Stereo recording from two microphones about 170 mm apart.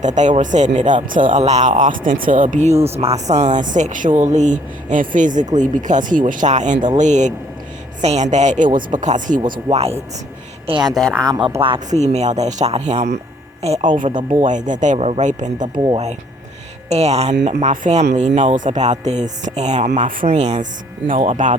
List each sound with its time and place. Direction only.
0.0 s speech: 45° right (ahead or behind)
9.4 s speech: 25° right (ahead or behind)
10.9 s speech: centre (ahead or behind)
11.2 s speech: 25° right (ahead or behind)
11.9 s speech: 40° right (ahead or behind)
14.4 s speech: 45° right (ahead or behind)
15.7 s speech: 25° right (ahead or behind)
16.9 s speech: 40° right (ahead or behind)